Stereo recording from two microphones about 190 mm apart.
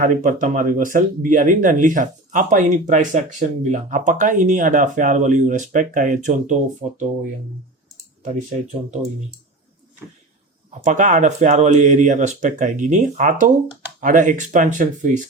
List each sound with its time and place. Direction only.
0.0 s speech: 45° right (ahead or behind)
10.8 s speech: 40° right (ahead or behind)